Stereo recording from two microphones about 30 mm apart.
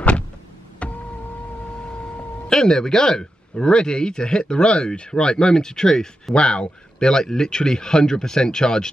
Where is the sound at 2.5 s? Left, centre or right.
Left.